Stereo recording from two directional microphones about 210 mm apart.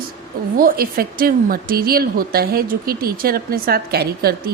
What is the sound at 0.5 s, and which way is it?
Speech, 45° right (ahead or behind).